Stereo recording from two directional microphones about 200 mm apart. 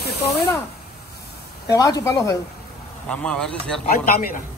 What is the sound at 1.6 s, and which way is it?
Speech, 20° left (ahead or behind).